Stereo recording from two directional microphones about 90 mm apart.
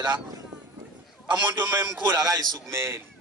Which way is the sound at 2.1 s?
40° right (ahead or behind).